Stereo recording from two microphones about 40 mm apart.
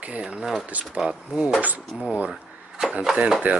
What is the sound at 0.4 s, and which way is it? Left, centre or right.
Speech, centre.